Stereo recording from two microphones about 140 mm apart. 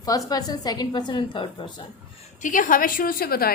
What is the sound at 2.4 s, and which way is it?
A woman's voice, 70° left (ahead or behind).